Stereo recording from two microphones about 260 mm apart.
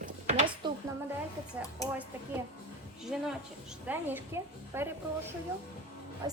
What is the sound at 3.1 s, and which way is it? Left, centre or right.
A woman's voice, centre.